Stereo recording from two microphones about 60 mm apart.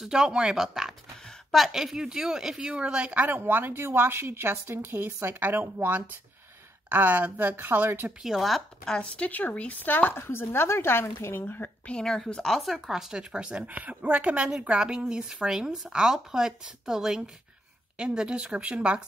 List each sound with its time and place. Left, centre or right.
0.0 s a woman's voice: centre
3.3 s a woman's voice: right
8.2 s speech: centre
9.0 s speech: left
11.8 s a woman's voice: centre
12.5 s a woman's voice: centre